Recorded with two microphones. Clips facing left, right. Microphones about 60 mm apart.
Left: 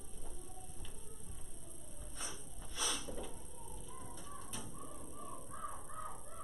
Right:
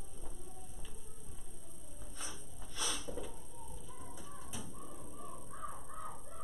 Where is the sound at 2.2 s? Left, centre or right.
Centre.